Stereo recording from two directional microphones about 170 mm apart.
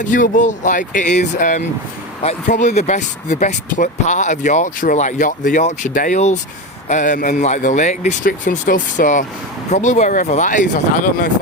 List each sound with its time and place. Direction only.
0.0 s speech: 50° left (ahead or behind)